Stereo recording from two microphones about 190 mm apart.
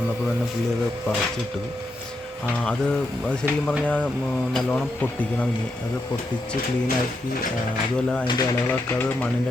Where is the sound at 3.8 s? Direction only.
5° left (ahead or behind).